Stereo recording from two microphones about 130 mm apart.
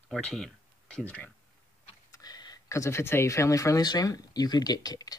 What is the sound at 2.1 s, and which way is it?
Speech, 30° left (ahead or behind).